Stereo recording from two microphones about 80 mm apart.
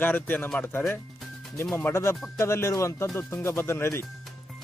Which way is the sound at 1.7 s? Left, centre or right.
Left.